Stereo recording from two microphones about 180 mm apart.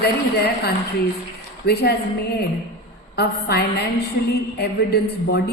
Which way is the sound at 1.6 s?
65° left (ahead or behind).